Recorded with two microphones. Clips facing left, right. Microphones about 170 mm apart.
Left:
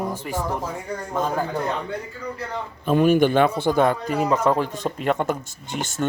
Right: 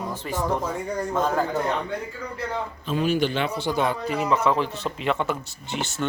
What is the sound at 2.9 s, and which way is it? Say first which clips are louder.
Speech: left 7 dB; 55° left (ahead or behind).